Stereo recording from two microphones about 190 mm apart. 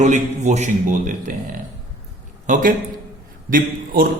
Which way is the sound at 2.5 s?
45° right (ahead or behind).